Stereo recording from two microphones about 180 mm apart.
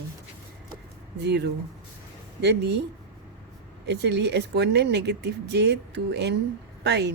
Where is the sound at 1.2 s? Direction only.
70° right (ahead or behind).